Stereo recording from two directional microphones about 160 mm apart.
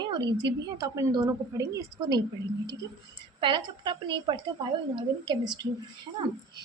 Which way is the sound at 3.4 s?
30° right (ahead or behind).